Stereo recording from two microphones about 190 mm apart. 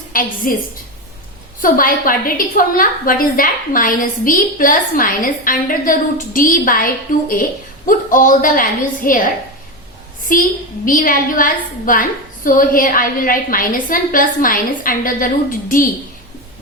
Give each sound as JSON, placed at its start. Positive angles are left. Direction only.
{"t": 0.1, "sound": "a woman's voice", "side_deg": 45}
{"t": 1.6, "sound": "a woman's voice", "side_deg": 45}